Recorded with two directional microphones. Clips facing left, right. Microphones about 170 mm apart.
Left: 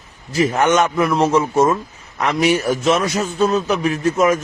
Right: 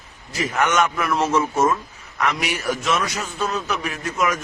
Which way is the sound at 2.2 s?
30° left (ahead or behind).